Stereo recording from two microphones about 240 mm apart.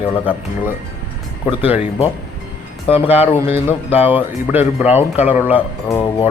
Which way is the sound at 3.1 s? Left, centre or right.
Centre.